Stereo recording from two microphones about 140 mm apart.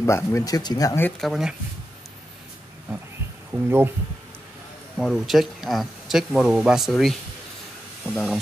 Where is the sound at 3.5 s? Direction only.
15° right (ahead or behind).